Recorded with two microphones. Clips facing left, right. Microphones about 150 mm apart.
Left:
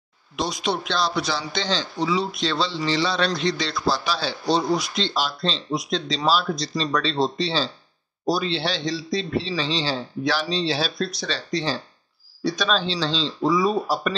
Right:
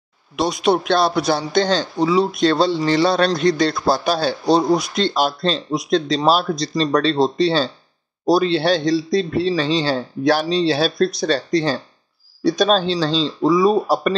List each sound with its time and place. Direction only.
0.4 s a man's voice: 55° right (ahead or behind)
13.4 s a man's voice: 60° right (ahead or behind)